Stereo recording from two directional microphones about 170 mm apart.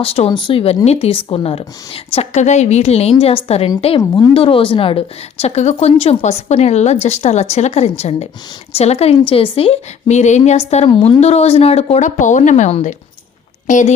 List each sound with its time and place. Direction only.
0.0 s a woman's voice: 35° left (ahead or behind)